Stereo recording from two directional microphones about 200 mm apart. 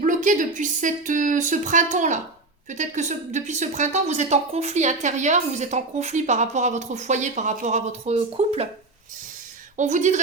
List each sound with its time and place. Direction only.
0.0 s a woman's voice: 40° right (ahead or behind)
9.7 s a woman's voice: 35° right (ahead or behind)